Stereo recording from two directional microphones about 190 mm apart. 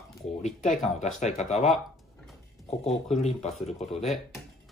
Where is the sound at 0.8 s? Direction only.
35° left (ahead or behind).